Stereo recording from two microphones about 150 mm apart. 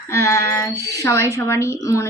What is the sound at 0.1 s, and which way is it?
Female singing, 20° left (ahead or behind).